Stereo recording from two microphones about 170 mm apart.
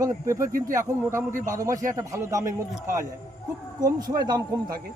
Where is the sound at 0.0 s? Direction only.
15° right (ahead or behind).